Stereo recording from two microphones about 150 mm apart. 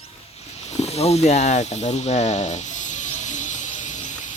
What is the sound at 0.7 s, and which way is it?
Snake, 45° left (ahead or behind).